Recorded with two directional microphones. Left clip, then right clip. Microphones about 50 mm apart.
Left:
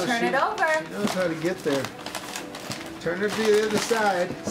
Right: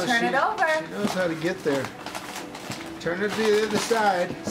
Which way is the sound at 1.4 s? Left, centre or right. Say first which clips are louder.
Even; right.